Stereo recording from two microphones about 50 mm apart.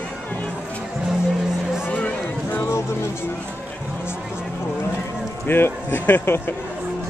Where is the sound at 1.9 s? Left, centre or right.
Left.